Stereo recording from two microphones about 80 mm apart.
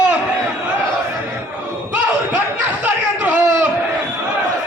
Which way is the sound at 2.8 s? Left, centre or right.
Right.